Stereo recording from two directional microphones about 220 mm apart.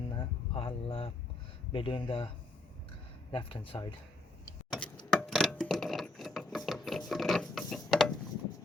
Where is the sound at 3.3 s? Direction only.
25° left (ahead or behind).